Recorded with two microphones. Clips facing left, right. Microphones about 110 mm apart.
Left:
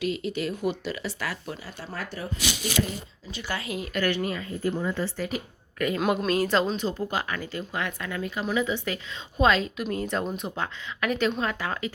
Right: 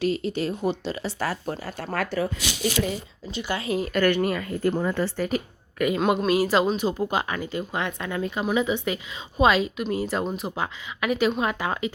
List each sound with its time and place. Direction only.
0.0 s speech: 35° right (ahead or behind)
1.6 s speech: 55° right (ahead or behind)
2.0 s speech: 90° right
3.3 s speech: 20° right (ahead or behind)
3.7 s speech: 40° right (ahead or behind)
6.0 s speech: centre (ahead or behind); by 11.9 s 20° right (ahead or behind)